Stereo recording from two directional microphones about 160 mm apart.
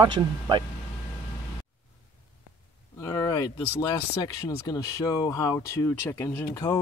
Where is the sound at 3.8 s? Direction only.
25° left (ahead or behind).